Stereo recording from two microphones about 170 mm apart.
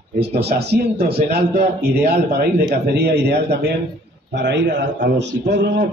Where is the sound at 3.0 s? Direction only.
75° right (ahead or behind).